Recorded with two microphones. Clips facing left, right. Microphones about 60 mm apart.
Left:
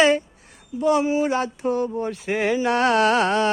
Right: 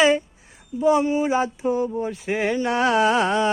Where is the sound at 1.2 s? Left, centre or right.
Centre.